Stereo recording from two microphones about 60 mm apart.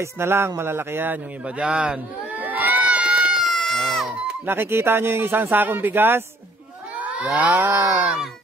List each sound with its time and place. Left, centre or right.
0.0 s speech: right
1.4 s run: centre
3.3 s goat: centre
4.5 s speech: right
7.4 s speech: right
7.9 s speech: right